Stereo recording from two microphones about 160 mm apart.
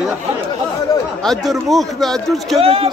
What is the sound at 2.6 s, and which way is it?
Speech, 40° right (ahead or behind).